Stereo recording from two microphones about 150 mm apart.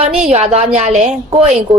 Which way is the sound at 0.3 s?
45° right (ahead or behind).